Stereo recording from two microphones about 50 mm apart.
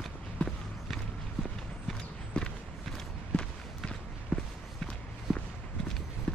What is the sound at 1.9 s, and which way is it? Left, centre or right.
Clip-clop, centre.